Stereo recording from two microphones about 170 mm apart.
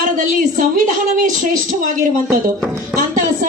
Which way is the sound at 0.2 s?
50° right (ahead or behind).